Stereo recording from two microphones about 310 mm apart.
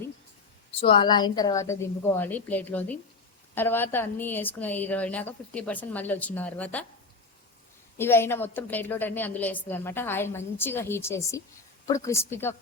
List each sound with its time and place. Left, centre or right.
0.8 s a woman's voice: centre
7.9 s a woman's voice: centre